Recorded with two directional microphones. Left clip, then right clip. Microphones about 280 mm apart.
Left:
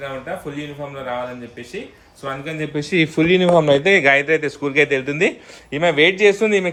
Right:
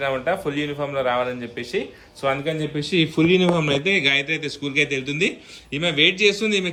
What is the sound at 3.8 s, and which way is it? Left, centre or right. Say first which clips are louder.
A man's voice: left 5 dB; centre.